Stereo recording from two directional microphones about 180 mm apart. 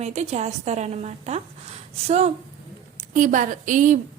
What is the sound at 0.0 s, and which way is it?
A woman's voice, 35° right (ahead or behind).